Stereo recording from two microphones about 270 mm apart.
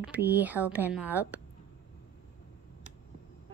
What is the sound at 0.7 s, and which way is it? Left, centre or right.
Speech, centre.